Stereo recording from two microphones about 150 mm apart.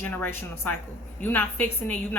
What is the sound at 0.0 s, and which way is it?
Speech, 15° left (ahead or behind).